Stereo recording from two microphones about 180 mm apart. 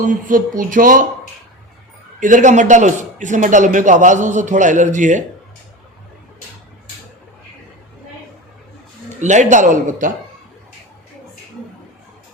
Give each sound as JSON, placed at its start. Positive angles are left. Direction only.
{"t": 0.0, "sound": "a man's voice", "side_deg": -50}
{"t": 2.2, "sound": "a man's voice", "side_deg": -45}
{"t": 9.2, "sound": "a man's voice", "side_deg": -40}